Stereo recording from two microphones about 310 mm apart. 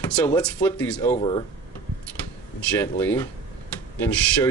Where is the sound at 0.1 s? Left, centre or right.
Centre.